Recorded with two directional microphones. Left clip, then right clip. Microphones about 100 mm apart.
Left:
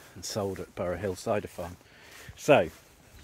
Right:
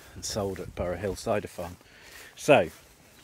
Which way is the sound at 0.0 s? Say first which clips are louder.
Right 1 dB; 35° right (ahead or behind).